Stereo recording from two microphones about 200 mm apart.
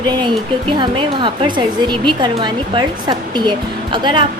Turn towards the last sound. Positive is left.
turn(degrees=-25)  # may be behind; listen again after turning